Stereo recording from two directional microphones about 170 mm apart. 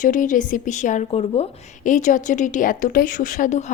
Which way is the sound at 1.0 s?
35° left (ahead or behind).